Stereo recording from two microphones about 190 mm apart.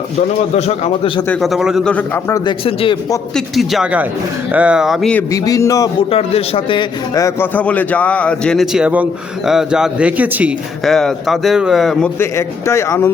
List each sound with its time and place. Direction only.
0.5 s a man's voice: 30° left (ahead or behind)
1.3 s speech: centre (ahead or behind)
2.3 s speech: 25° left (ahead or behind)
3.3 s speech: centre (ahead or behind)
5.3 s speech: 15° left (ahead or behind)
6.1 s a man's voice: 30° left (ahead or behind); by 13.1 s 15° left (ahead or behind)